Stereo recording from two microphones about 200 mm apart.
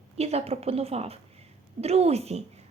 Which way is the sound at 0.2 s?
30° right (ahead or behind).